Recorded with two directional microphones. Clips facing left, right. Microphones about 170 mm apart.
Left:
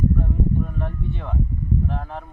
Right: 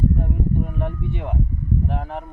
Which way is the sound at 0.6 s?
15° right (ahead or behind).